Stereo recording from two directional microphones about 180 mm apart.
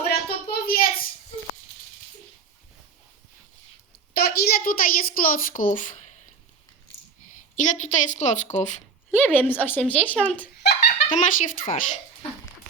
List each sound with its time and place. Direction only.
0.1 s a sound: 55° left (ahead or behind)
4.1 s a woman's voice: 55° left (ahead or behind)
7.5 s a woman's voice: 40° left (ahead or behind)
9.3 s speech: 10° left (ahead or behind)
10.6 s giggle: 65° left (ahead or behind)
11.1 s a woman's voice: 40° left (ahead or behind)